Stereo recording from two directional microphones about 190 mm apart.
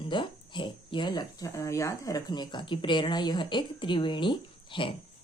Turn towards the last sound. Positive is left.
turn(degrees=25)  # may be behind; listen again after turning